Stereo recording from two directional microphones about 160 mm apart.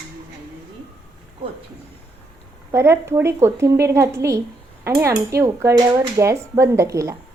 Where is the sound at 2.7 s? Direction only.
15° right (ahead or behind).